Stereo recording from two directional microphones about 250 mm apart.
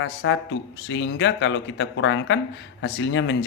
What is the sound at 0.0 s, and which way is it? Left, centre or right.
Speech, left.